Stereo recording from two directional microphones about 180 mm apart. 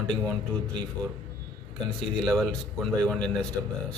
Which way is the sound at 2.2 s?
5° left (ahead or behind).